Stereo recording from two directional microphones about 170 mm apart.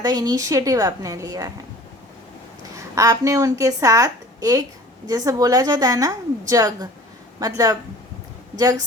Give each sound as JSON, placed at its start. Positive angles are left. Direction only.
{"t": 0.0, "sound": "a woman's voice", "side_deg": -20}
{"t": 2.7, "sound": "a woman's voice", "side_deg": -20}